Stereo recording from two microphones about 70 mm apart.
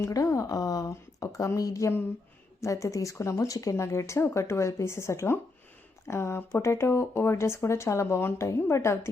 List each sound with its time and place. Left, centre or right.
0.0 s speech: left